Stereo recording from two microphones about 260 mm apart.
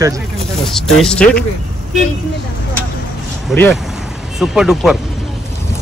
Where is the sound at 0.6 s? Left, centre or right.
Centre.